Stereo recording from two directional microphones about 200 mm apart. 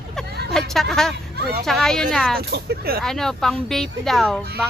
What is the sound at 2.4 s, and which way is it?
Speech, 55° right (ahead or behind).